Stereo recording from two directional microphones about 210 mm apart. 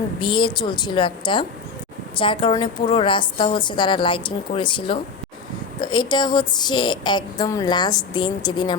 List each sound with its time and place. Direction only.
0.2 s speech: 20° left (ahead or behind)